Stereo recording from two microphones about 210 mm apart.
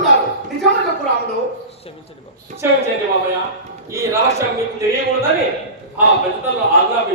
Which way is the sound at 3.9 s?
15° right (ahead or behind).